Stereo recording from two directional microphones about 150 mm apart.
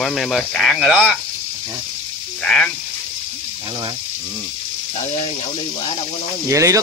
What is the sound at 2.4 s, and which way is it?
Speech, 5° left (ahead or behind).